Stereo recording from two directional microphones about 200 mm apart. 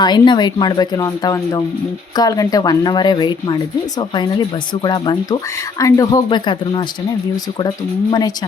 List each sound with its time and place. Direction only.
0.0 s speech: 20° left (ahead or behind)